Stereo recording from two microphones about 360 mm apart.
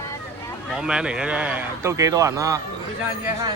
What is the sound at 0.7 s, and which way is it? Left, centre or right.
A man's voice, centre.